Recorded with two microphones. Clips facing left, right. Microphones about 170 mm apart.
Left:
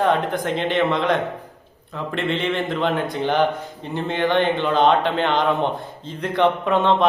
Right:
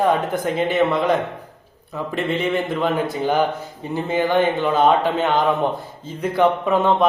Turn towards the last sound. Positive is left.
turn(degrees=-5)  # may be behind; listen again after turning